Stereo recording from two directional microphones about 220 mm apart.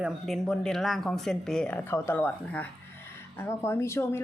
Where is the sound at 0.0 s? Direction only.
Centre (ahead or behind).